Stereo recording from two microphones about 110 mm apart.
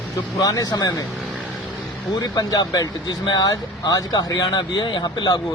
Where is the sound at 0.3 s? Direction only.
30° left (ahead or behind).